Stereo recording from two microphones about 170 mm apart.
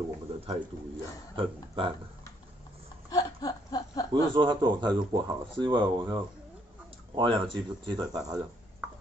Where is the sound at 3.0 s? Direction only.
20° left (ahead or behind).